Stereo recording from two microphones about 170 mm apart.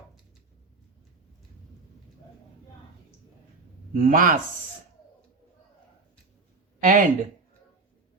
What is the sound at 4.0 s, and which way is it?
Speech, 50° right (ahead or behind).